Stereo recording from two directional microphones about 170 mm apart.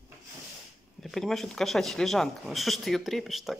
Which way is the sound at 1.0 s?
Centre (ahead or behind).